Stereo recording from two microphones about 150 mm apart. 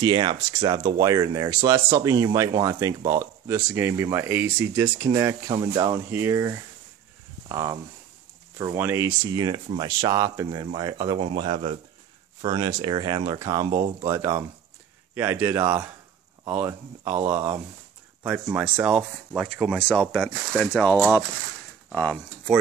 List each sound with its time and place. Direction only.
0.0 s speech: 30° right (ahead or behind)
8.7 s speech: 15° right (ahead or behind)
16.6 s speech: 15° right (ahead or behind)
18.2 s speech: 10° right (ahead or behind)